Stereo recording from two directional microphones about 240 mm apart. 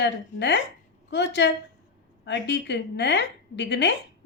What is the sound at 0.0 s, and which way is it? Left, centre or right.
A woman's voice, left.